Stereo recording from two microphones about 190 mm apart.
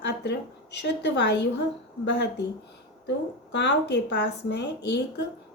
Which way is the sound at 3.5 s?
65° left (ahead or behind).